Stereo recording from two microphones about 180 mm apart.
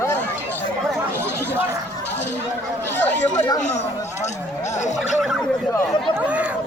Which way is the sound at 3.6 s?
40° left (ahead or behind).